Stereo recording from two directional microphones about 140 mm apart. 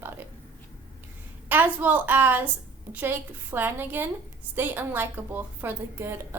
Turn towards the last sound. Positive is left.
turn(degrees=-20)  # may be behind; listen again after turning